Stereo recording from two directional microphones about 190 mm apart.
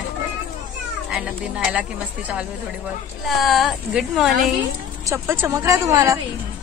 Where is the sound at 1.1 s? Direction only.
5° right (ahead or behind).